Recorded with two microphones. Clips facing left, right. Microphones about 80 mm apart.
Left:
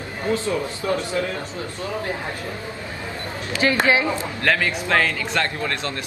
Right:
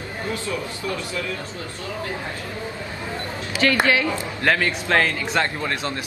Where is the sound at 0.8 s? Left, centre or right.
Left.